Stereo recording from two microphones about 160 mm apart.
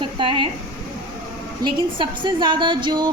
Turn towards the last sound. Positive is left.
turn(degrees=-30)  # may be behind; listen again after turning